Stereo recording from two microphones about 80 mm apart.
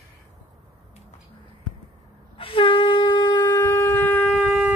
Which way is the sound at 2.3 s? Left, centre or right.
Left.